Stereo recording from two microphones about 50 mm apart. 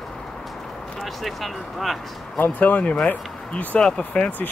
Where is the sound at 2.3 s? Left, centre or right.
Left.